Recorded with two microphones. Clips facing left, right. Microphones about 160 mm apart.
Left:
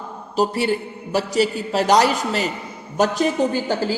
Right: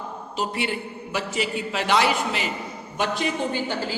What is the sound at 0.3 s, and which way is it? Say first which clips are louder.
A woman's voice: left 8 dB; 40° left (ahead or behind).